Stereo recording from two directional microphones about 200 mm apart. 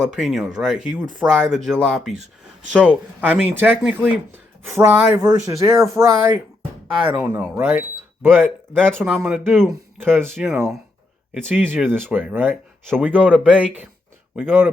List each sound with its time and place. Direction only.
0.0 s speech: centre (ahead or behind)